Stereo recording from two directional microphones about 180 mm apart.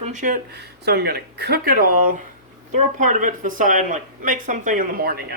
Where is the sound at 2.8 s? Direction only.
45° right (ahead or behind).